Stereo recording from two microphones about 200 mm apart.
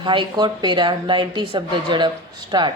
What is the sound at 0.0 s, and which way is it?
A woman's voice, 25° right (ahead or behind).